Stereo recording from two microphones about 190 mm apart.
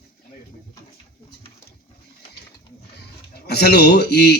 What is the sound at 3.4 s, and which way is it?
Speech, 55° left (ahead or behind).